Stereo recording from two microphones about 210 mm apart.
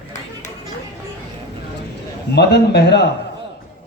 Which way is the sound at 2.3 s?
50° left (ahead or behind).